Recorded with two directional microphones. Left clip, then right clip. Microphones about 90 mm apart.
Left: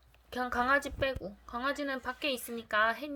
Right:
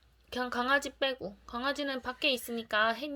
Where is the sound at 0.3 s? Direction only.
25° right (ahead or behind).